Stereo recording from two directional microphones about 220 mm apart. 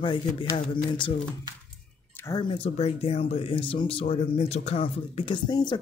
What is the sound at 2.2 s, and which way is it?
Speech, 20° left (ahead or behind).